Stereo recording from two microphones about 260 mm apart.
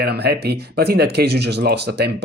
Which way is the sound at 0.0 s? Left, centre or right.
Right.